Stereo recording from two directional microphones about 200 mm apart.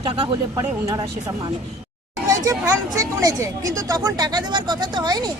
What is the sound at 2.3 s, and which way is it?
Speech, 15° right (ahead or behind).